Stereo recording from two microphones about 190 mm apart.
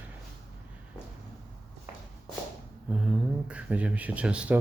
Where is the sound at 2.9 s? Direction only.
5° right (ahead or behind).